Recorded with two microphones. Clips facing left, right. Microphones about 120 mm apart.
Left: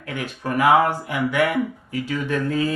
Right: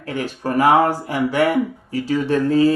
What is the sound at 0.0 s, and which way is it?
A man's voice, 35° right (ahead or behind).